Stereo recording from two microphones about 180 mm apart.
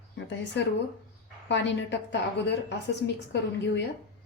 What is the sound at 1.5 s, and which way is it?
A woman's voice, 80° left.